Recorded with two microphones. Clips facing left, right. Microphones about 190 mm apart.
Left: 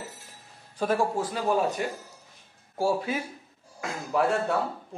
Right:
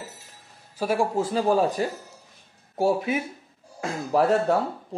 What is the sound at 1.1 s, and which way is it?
Speech, 30° right (ahead or behind).